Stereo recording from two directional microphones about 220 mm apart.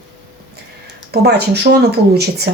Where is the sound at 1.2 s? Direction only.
50° right (ahead or behind).